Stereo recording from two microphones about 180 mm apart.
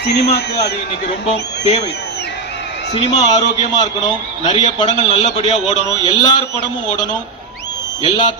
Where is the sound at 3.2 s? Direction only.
40° left (ahead or behind).